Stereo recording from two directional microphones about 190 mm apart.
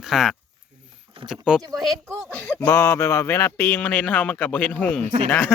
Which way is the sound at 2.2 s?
10° left (ahead or behind).